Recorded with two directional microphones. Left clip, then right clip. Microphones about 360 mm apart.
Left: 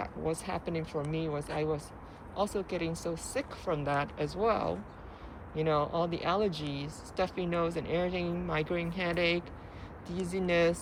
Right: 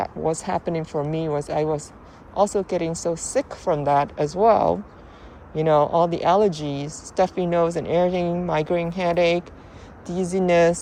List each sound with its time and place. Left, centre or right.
0.0 s speech: centre